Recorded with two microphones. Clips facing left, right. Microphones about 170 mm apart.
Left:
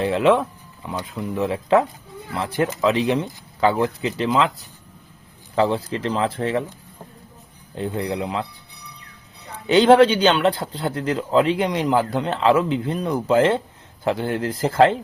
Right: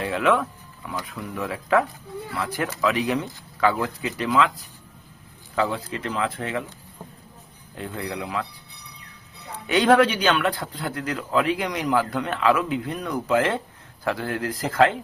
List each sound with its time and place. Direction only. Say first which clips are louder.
0.0 s speech: left 5 dB; 25° left (ahead or behind)
5.5 s speech: left 5 dB; 30° left (ahead or behind)
7.8 s speech: left 6 dB; 25° left (ahead or behind)
9.6 s speech: left 5 dB; 25° left (ahead or behind)